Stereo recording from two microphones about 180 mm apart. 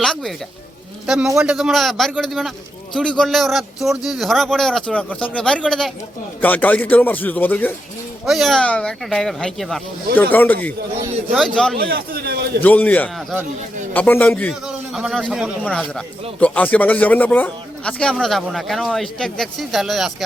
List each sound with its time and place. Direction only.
0.0 s sheep: centre (ahead or behind)
1.0 s speech: 5° right (ahead or behind)
8.2 s speech: centre (ahead or behind)
11.8 s a man's voice: 55° right (ahead or behind)
12.5 s speech: 10° left (ahead or behind)
14.7 s a man's voice: centre (ahead or behind)